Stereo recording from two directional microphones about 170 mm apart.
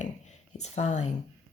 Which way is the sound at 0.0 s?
40° left (ahead or behind).